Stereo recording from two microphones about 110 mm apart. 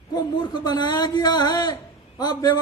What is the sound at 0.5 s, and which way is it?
A man's voice, 40° left (ahead or behind).